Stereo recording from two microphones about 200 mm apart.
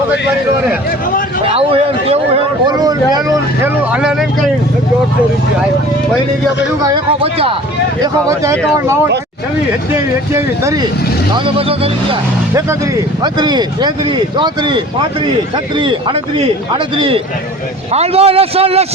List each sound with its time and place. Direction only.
1.5 s a man's voice: 30° right (ahead or behind)
3.9 s speech: 5° right (ahead or behind)
6.8 s a man's voice: 25° right (ahead or behind)
9.9 s speech: 15° right (ahead or behind)
11.3 s a man's voice: 25° right (ahead or behind)
13.2 s a man's voice: 20° right (ahead or behind)